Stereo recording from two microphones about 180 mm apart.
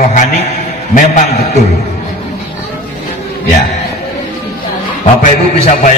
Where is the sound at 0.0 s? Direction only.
40° left (ahead or behind).